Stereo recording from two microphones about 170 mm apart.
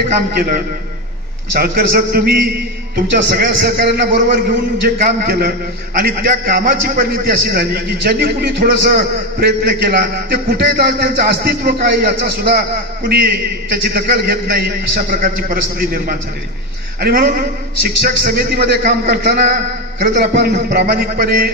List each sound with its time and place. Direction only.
0.4 s a man's voice: 60° right (ahead or behind)
3.3 s a man's voice: 85° right; by 21.5 s 65° right (ahead or behind)